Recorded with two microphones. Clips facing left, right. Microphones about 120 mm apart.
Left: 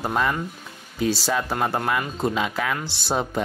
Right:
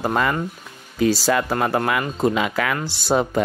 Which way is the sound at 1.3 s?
85° right.